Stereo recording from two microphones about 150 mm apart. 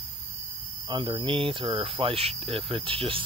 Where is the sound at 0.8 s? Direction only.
30° right (ahead or behind).